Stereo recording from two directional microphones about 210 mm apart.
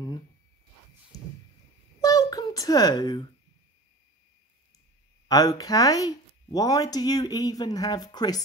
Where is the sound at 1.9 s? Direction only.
15° left (ahead or behind).